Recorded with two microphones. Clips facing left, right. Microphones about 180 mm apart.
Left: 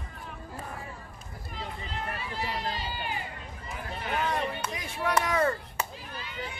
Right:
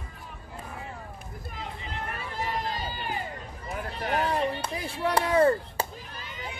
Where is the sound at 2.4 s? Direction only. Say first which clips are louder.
Right 3 dB; 45° right (ahead or behind).